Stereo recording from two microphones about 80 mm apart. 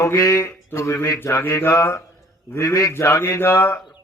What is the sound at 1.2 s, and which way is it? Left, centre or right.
A man's voice, left.